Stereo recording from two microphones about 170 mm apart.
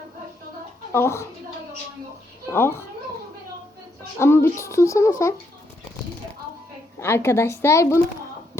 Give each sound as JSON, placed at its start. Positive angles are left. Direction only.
{"t": 0.9, "sound": "speech", "side_deg": 15}
{"t": 2.5, "sound": "speech", "side_deg": 15}
{"t": 4.2, "sound": "speech", "side_deg": 15}
{"t": 7.0, "sound": "speech", "side_deg": 15}